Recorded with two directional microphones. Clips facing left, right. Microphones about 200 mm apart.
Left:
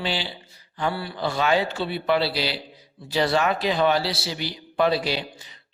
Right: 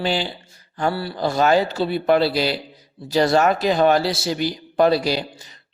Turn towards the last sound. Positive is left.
turn(degrees=-40)  # may be behind; listen again after turning